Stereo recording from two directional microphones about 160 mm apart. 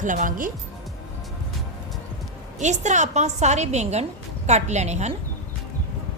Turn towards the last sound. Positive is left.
turn(degrees=-45)  # may be behind; listen again after turning